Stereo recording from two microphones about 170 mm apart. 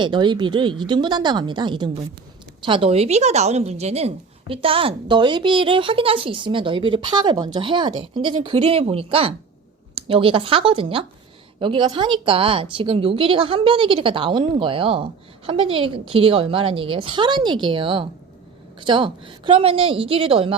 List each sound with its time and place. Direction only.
0.0 s a woman's voice: 25° right (ahead or behind)